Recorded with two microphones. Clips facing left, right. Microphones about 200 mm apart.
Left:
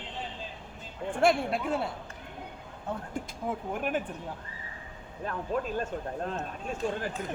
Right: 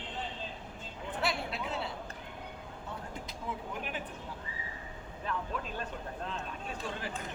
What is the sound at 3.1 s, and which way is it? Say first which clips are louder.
Speech: left 6 dB; 50° left (ahead or behind).